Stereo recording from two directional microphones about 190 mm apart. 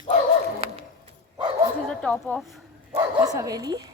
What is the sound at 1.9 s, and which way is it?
Speech, 5° left (ahead or behind).